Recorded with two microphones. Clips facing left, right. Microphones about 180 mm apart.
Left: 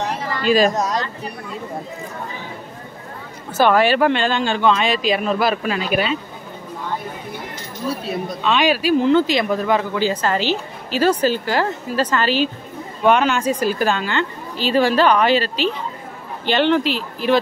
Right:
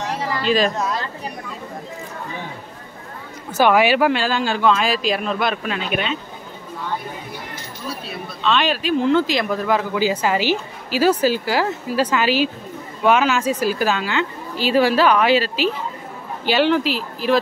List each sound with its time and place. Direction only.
0.7 s a sound: 40° left (ahead or behind)
3.5 s a woman's voice: 10° right (ahead or behind)
8.3 s speech: 10° left (ahead or behind)
9.0 s a woman's voice: centre (ahead or behind)